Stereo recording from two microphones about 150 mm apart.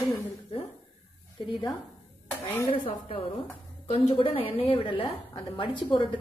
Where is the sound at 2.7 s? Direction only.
35° left (ahead or behind).